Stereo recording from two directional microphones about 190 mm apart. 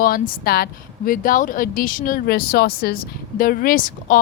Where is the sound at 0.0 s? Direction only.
50° left (ahead or behind).